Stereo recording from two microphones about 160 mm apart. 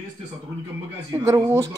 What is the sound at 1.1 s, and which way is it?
Speech, 20° right (ahead or behind).